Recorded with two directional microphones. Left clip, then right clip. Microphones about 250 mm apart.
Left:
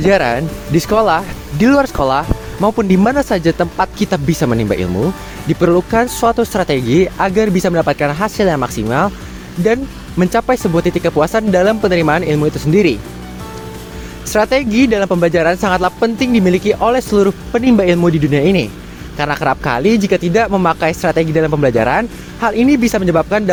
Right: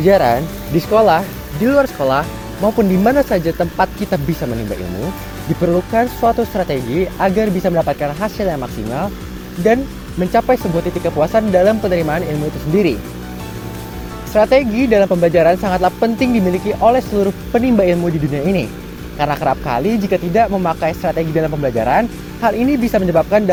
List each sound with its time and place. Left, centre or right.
0.0 s speech: left
5.6 s speech: left
14.3 s speech: left